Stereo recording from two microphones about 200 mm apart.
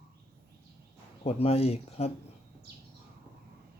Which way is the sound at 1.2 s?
30° left (ahead or behind).